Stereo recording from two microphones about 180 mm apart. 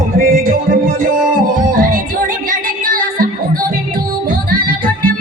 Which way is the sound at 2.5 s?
50° right (ahead or behind).